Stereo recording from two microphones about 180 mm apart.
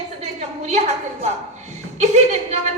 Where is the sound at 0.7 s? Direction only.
40° right (ahead or behind).